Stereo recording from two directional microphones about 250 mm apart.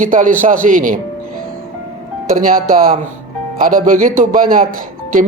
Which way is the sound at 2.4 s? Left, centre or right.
Right.